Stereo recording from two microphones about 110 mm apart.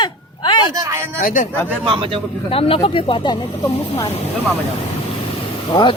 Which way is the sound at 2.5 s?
55° left (ahead or behind).